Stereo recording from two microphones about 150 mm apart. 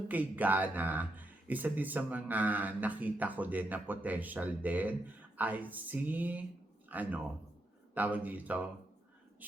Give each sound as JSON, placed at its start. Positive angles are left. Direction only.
{"t": 0.1, "sound": "speech", "side_deg": -10}